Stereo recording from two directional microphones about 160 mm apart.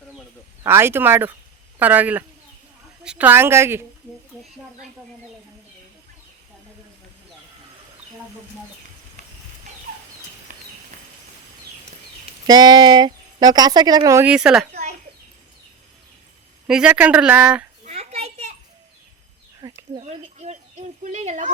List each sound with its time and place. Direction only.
0.6 s speech: 15° right (ahead or behind)
10.5 s a sound: 55° right (ahead or behind)
12.5 s speech: 25° right (ahead or behind)
14.3 s speech: 5° right (ahead or behind)
16.6 s speech: 5° right (ahead or behind)
17.8 s a sound: 40° right (ahead or behind)
19.6 s speech: 25° right (ahead or behind)
20.0 s speech: 40° right (ahead or behind)